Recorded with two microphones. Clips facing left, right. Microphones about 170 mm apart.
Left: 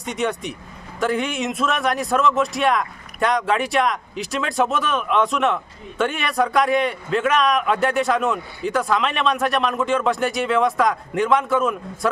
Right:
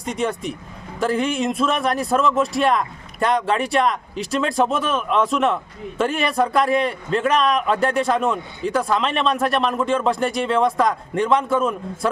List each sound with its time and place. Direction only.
0.0 s a man's voice: centre (ahead or behind)
7.2 s a man's voice: 35° right (ahead or behind)
7.4 s a man's voice: centre (ahead or behind)